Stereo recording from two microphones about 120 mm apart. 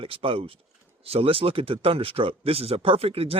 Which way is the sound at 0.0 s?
50° right (ahead or behind).